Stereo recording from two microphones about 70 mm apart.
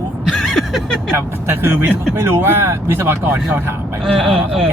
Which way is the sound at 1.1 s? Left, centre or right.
Right.